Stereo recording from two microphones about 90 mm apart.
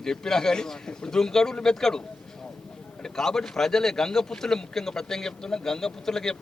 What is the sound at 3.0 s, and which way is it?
A man's voice, 5° left (ahead or behind).